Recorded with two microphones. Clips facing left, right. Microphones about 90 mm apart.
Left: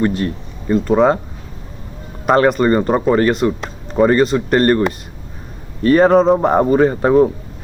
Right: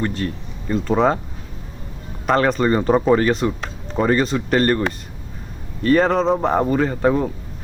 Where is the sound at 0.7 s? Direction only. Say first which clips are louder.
Left 5 dB; centre (ahead or behind).